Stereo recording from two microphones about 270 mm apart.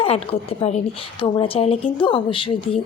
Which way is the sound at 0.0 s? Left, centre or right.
Left.